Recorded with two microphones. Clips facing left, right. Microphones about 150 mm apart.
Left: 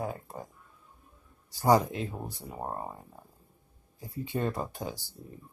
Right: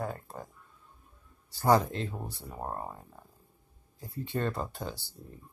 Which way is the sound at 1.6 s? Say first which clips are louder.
Left 1 dB; 15° left (ahead or behind).